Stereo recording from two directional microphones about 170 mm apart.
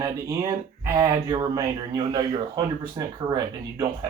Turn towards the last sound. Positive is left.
turn(degrees=-25)  # may be behind; listen again after turning